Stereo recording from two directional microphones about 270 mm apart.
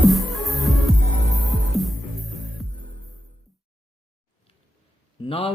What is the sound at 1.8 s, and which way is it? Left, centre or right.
Music, centre.